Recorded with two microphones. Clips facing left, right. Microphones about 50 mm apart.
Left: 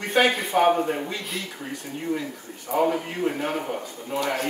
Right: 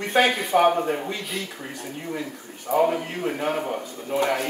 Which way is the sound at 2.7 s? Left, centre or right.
Centre.